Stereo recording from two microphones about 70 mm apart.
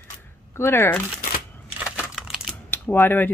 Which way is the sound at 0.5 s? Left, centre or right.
Left.